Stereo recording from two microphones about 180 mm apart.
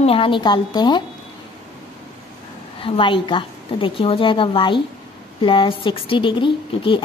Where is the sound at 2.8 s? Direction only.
30° left (ahead or behind).